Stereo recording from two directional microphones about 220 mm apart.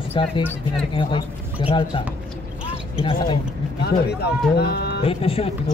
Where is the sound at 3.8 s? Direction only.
50° left (ahead or behind).